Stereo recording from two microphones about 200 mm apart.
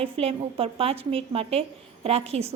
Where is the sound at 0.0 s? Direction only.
30° right (ahead or behind).